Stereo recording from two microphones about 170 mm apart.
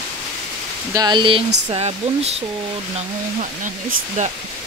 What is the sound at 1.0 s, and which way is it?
Speech, 25° right (ahead or behind).